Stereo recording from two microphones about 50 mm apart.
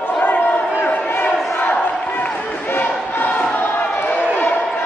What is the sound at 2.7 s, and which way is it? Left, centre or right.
Choir, left.